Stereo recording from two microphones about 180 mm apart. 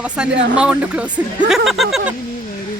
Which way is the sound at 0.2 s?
5° right (ahead or behind).